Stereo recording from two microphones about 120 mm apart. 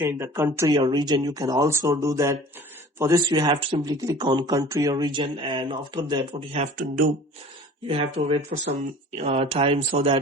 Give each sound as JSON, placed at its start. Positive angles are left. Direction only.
{"t": 0.0, "sound": "speech", "side_deg": -20}
{"t": 0.7, "sound": "speech", "side_deg": -35}
{"t": 3.8, "sound": "speech", "side_deg": -30}
{"t": 6.5, "sound": "speech", "side_deg": -65}
{"t": 7.9, "sound": "speech", "side_deg": -50}